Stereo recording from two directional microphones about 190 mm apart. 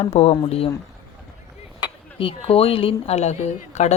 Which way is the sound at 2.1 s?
30° left (ahead or behind).